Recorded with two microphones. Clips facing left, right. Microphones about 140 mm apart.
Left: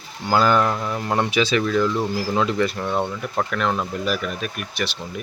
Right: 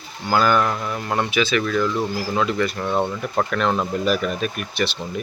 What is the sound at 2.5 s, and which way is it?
Speech, 30° left (ahead or behind).